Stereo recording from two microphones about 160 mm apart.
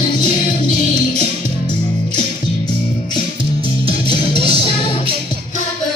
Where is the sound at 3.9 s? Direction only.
30° left (ahead or behind).